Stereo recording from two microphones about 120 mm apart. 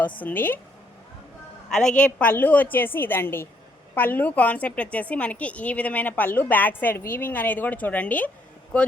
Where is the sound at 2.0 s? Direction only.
10° left (ahead or behind).